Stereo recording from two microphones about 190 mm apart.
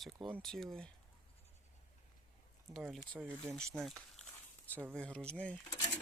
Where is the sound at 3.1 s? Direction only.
Centre (ahead or behind).